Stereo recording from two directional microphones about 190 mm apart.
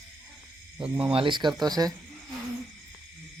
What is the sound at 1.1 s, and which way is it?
Speech, 25° right (ahead or behind).